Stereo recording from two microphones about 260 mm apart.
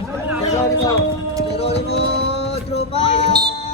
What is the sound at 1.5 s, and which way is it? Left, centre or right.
Music, left.